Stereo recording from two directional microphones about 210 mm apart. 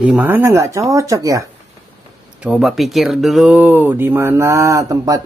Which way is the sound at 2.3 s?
5° right (ahead or behind).